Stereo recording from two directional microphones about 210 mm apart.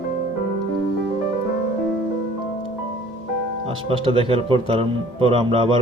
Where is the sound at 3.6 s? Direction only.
25° right (ahead or behind).